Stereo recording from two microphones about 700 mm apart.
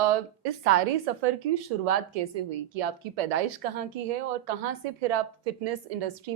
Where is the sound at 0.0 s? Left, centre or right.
Right.